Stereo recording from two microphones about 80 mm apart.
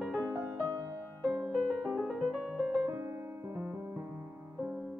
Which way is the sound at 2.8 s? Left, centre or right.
Right.